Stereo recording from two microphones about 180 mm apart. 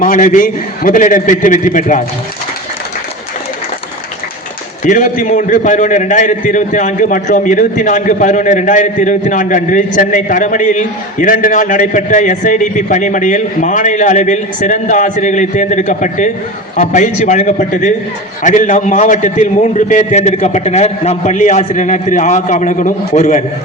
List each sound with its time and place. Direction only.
0.0 s a man's voice: 50° left (ahead or behind)
4.8 s a man's voice: 45° left (ahead or behind)